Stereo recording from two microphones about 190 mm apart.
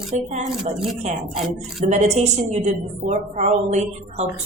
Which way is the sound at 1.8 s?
35° right (ahead or behind).